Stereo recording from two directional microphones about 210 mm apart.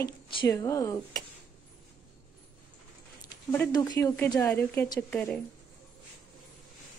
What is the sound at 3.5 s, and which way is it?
A woman's voice, 15° left (ahead or behind).